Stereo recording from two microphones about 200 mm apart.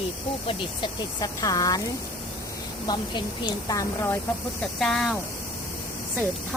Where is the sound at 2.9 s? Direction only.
20° left (ahead or behind).